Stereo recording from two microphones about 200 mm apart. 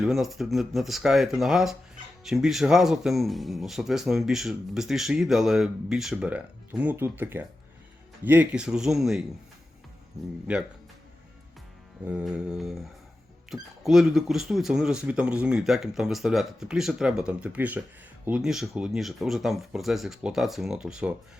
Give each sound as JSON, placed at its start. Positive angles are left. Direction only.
{"t": 0.0, "sound": "speech", "side_deg": 0}
{"t": 10.5, "sound": "speech", "side_deg": -5}
{"t": 12.0, "sound": "speech", "side_deg": -5}